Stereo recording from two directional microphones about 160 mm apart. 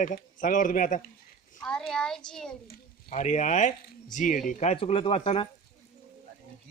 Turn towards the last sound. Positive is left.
turn(degrees=35)  # may be behind; listen again after turning